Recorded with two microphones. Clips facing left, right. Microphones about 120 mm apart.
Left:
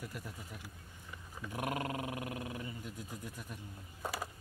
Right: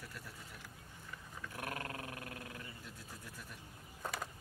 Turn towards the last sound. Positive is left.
turn(degrees=5)  # may be behind; listen again after turning